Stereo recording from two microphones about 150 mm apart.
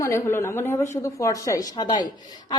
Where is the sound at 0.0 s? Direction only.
15° left (ahead or behind).